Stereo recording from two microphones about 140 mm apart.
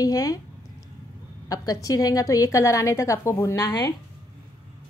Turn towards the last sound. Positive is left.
turn(degrees=25)  # may be behind; listen again after turning